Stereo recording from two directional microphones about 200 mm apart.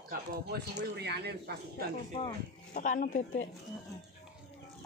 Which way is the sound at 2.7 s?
40° left (ahead or behind).